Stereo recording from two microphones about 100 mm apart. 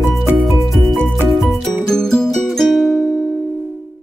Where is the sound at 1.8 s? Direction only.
5° left (ahead or behind).